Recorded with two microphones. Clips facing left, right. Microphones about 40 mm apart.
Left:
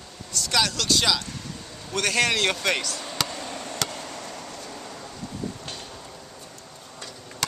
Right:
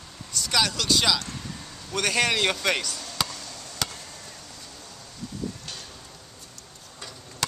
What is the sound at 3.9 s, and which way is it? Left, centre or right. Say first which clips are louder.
Chop: left 7 dB; left.